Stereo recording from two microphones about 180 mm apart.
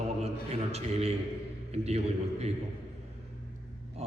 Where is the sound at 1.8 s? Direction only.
35° right (ahead or behind).